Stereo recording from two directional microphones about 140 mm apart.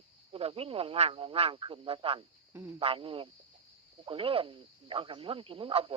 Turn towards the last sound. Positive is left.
turn(degrees=-40)  # may be behind; listen again after turning